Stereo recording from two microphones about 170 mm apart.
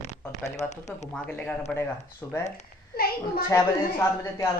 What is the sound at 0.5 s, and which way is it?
Speech, 40° left (ahead or behind).